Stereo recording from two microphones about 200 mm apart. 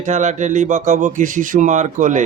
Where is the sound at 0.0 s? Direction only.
35° right (ahead or behind).